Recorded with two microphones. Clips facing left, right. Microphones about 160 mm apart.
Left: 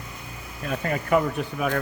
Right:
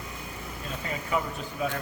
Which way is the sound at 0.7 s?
60° left (ahead or behind).